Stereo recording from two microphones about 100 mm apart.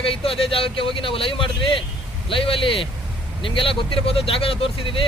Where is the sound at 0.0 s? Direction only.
70° left (ahead or behind).